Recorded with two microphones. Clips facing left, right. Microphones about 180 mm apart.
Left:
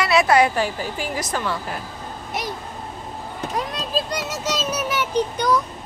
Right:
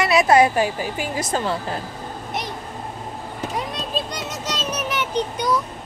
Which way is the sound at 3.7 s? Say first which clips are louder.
Left 2 dB; 5° left (ahead or behind).